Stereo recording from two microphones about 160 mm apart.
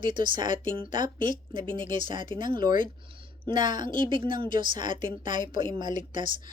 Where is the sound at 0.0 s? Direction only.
30° right (ahead or behind).